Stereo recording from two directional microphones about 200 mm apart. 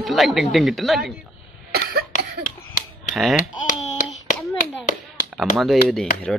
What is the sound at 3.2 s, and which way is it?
Speech, centre (ahead or behind).